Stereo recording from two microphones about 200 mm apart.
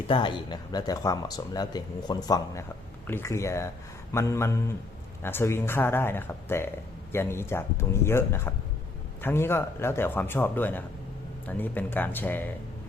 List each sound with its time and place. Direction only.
0.1 s speech: 25° left (ahead or behind)